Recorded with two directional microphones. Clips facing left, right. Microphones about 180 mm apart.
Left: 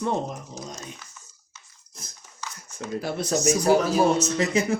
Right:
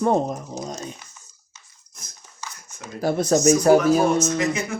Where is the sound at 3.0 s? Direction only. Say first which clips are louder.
Right 7 dB; 45° right (ahead or behind).